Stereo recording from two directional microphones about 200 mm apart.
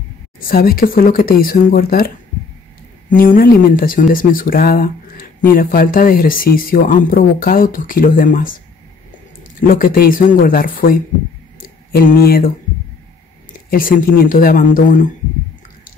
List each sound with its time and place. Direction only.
0.4 s speech: 45° left (ahead or behind)
13.7 s speech: 45° left (ahead or behind)